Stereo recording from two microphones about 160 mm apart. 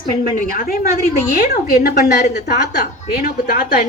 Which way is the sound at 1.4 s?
85° left.